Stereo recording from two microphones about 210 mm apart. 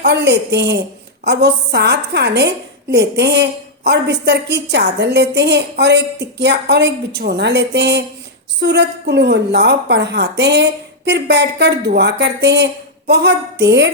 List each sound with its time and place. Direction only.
0.0 s a woman's voice: 55° right (ahead or behind)